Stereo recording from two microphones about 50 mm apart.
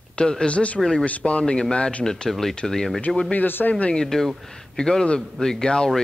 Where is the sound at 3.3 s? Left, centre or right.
Left.